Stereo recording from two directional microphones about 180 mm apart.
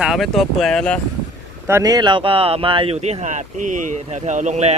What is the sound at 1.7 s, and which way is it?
Speech, 15° right (ahead or behind).